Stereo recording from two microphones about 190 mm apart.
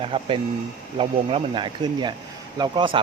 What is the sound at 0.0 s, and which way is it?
Speech, 30° right (ahead or behind).